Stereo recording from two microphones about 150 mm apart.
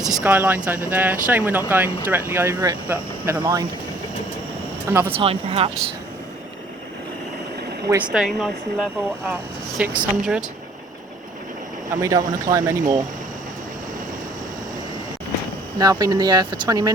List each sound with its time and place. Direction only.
0.0 s speech: centre (ahead or behind)
3.4 s speech: 25° right (ahead or behind)
4.9 s speech: 15° right (ahead or behind)
5.2 s speech: 40° right (ahead or behind)
8.1 s speech: centre (ahead or behind)
11.9 s speech: 20° right (ahead or behind)
15.8 s speech: 25° right (ahead or behind)